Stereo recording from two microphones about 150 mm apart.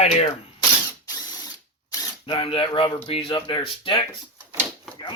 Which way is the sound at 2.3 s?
35° left (ahead or behind).